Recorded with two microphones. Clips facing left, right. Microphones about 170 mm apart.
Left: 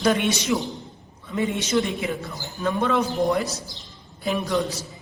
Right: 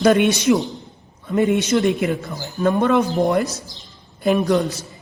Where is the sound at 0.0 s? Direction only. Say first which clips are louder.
Right 7 dB; 50° right (ahead or behind).